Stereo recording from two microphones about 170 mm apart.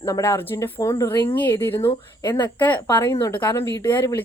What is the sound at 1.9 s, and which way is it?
Speech, 25° left (ahead or behind).